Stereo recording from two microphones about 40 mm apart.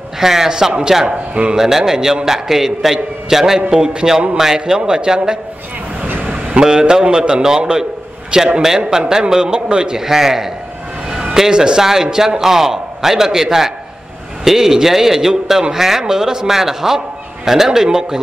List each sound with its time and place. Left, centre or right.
0.2 s a man's voice: centre; by 1.6 s right
1.6 s a man's voice: centre
6.2 s vehicle: right
6.6 s a man's voice: centre
9.9 s a man's voice: centre